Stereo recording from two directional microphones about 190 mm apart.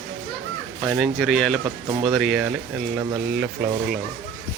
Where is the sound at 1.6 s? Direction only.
30° right (ahead or behind).